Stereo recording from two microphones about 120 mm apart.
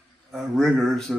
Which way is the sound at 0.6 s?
5° left (ahead or behind).